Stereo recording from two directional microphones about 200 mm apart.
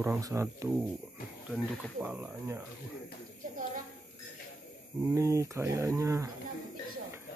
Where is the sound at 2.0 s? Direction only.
10° right (ahead or behind).